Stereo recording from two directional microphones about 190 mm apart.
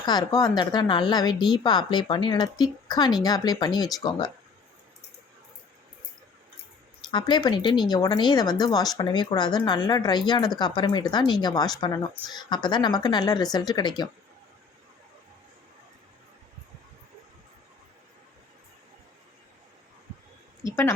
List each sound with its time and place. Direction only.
0.0 s speech: 20° left (ahead or behind)
7.1 s speech: 25° left (ahead or behind)
20.7 s a woman's voice: 15° left (ahead or behind)